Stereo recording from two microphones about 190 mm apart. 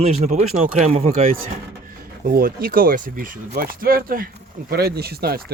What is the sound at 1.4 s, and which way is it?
Speech, 50° right (ahead or behind).